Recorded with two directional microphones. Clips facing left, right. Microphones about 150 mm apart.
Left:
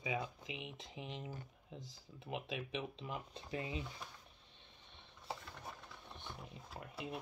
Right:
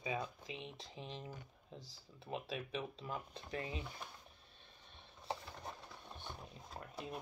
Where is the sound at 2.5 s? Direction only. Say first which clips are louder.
Even; 40° right (ahead or behind).